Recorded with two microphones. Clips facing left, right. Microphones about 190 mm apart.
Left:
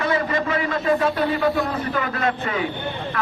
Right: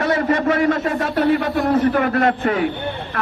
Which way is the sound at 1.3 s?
60° right (ahead or behind).